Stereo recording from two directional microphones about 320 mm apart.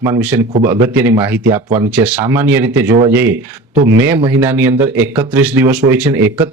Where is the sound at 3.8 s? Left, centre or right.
Right.